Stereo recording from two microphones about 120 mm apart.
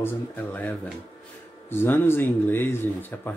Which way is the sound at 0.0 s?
15° left (ahead or behind).